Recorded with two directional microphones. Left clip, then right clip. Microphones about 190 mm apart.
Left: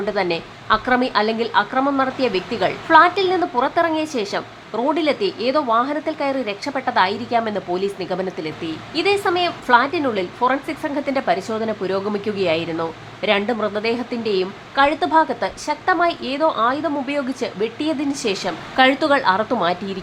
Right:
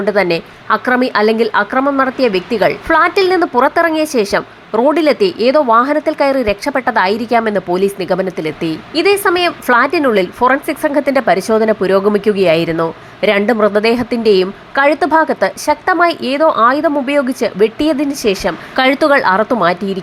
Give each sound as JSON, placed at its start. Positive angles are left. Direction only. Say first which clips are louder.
{"t": 0.0, "sound": "a woman's voice", "louder": "right 8 dB", "side_deg": -25}